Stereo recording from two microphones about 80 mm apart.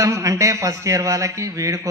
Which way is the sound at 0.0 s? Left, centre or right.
Right.